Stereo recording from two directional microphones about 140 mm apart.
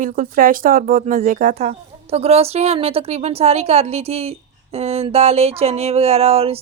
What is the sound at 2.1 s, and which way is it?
A woman's voice, 45° right (ahead or behind).